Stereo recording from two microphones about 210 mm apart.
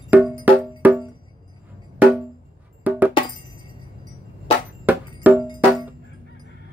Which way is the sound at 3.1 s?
20° left (ahead or behind).